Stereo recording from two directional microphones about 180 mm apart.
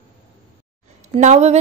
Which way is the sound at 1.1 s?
35° right (ahead or behind).